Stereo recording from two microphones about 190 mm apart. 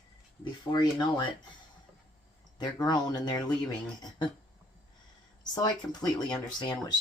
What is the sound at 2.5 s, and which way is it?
Speech, 20° left (ahead or behind).